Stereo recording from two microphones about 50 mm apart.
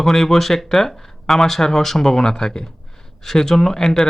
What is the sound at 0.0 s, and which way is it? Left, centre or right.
Speech, centre.